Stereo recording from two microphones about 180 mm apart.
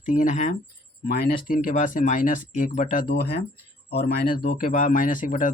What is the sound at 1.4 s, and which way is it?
Speech, 50° left (ahead or behind).